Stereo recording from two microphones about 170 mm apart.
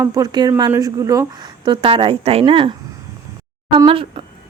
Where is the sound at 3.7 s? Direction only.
30° right (ahead or behind).